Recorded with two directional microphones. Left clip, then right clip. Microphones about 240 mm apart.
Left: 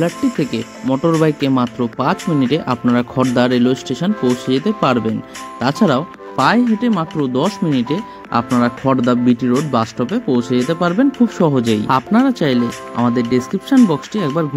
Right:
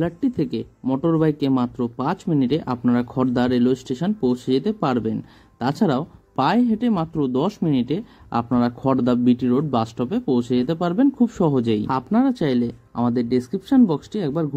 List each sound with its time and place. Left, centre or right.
0.0 s speech: left